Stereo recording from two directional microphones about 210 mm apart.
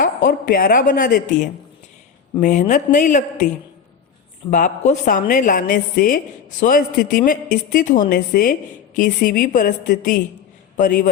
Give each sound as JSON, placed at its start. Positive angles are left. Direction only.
{"t": 0.0, "sound": "a man's voice", "side_deg": 40}
{"t": 4.5, "sound": "a man's voice", "side_deg": 35}